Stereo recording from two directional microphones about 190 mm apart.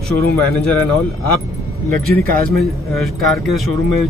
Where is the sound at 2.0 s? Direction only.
50° right (ahead or behind).